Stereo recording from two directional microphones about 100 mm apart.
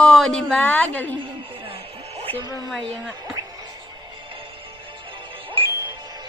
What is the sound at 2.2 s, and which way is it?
Music, 65° right (ahead or behind).